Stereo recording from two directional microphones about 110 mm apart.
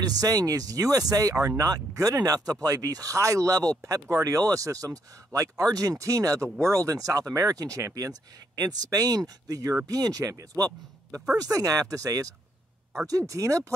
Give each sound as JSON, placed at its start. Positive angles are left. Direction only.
{"t": 0.0, "sound": "speech", "side_deg": -35}